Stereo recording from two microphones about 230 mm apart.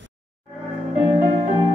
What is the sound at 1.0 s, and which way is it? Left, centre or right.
Music, right.